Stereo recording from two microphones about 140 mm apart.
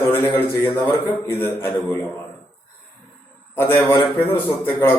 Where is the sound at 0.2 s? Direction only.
15° left (ahead or behind).